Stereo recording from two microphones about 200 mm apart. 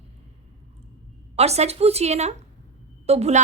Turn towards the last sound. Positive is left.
turn(degrees=-30)  # may be behind; listen again after turning